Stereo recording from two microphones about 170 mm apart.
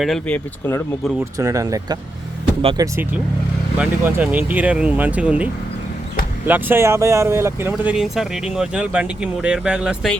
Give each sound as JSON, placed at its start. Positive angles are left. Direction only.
{"t": 0.0, "sound": "speech", "side_deg": 5}
{"t": 1.2, "sound": "speech", "side_deg": -20}
{"t": 7.9, "sound": "speech", "side_deg": 0}